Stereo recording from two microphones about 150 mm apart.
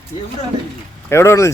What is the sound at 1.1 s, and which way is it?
Speech, 20° left (ahead or behind).